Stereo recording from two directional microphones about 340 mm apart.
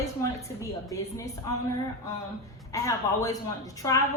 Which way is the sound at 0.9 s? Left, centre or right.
Centre.